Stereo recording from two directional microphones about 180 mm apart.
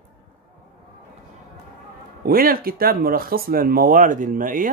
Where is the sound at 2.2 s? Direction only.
55° right (ahead or behind).